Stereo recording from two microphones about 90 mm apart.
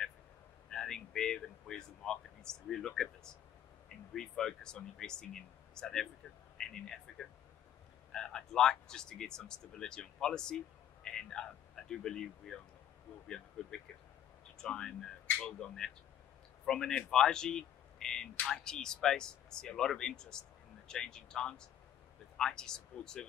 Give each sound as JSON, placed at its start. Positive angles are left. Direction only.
{"t": 0.7, "sound": "speech", "side_deg": 5}
{"t": 4.1, "sound": "speech", "side_deg": 5}
{"t": 13.6, "sound": "speech", "side_deg": 10}
{"t": 15.2, "sound": "a sound", "side_deg": 20}
{"t": 15.6, "sound": "speech", "side_deg": 5}